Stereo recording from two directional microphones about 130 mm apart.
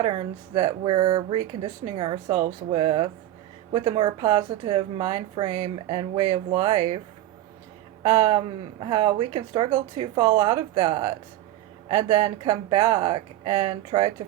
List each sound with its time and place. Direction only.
0.0 s a woman's voice: 45° right (ahead or behind)
8.0 s a sound: 60° right (ahead or behind)
8.3 s speech: 40° right (ahead or behind)